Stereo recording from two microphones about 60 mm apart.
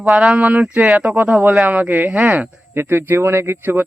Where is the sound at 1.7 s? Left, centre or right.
Right.